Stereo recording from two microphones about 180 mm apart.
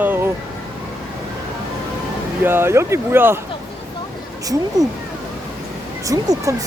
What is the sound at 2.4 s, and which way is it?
Speech, 10° right (ahead or behind).